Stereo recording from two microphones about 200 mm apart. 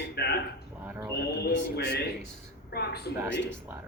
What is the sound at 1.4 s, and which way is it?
Speech, 55° left (ahead or behind).